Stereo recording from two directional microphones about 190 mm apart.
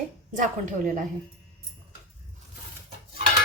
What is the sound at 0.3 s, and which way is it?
Speech, 40° right (ahead or behind).